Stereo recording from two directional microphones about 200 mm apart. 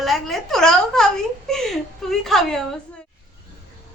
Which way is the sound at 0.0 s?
Centre (ahead or behind).